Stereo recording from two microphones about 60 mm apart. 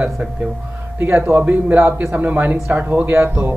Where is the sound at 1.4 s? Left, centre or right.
Right.